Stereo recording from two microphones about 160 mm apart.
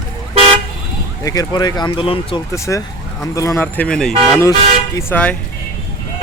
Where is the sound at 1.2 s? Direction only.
20° left (ahead or behind).